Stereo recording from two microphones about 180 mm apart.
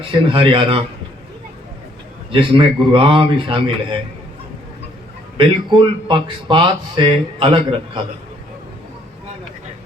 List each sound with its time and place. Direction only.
0.0 s speech: 30° right (ahead or behind)
2.3 s speech: 30° right (ahead or behind)
5.4 s speech: 25° right (ahead or behind)